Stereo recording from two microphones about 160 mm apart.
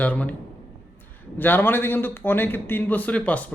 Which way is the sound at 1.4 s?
10° left (ahead or behind).